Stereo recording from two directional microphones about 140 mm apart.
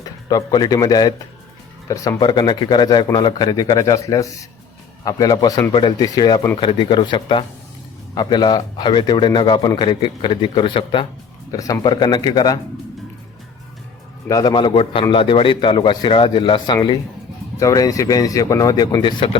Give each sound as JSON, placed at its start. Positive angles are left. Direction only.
{"t": 0.3, "sound": "a man's voice", "side_deg": 30}
{"t": 11.5, "sound": "a man's voice", "side_deg": 25}
{"t": 14.3, "sound": "speech", "side_deg": 25}
{"t": 14.5, "sound": "a man's voice", "side_deg": 35}